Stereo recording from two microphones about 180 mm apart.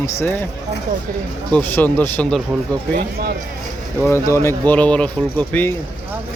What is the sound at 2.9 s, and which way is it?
Speech, 55° right (ahead or behind).